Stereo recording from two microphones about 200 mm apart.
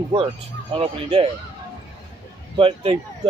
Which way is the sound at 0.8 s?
25° right (ahead or behind).